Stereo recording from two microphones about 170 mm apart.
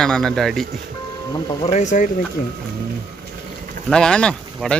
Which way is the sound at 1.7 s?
45° left (ahead or behind).